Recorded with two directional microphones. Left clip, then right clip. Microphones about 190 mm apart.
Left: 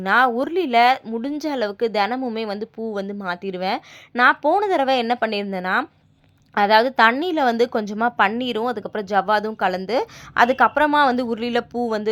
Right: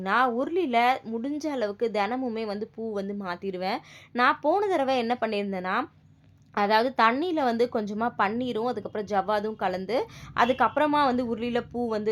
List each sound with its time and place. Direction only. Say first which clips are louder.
0.0 s speech: left 7 dB; 25° left (ahead or behind)